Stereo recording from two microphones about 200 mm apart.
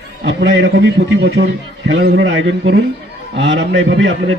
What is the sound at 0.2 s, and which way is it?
A man's voice, 60° right (ahead or behind).